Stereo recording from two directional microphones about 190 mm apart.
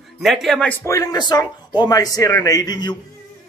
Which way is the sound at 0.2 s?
Centre (ahead or behind).